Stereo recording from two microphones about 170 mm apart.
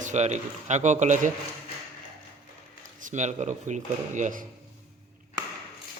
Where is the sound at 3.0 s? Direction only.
45° right (ahead or behind).